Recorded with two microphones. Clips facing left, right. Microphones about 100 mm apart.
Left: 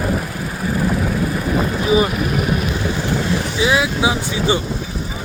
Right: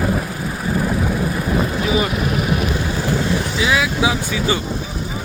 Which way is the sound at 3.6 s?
25° left (ahead or behind).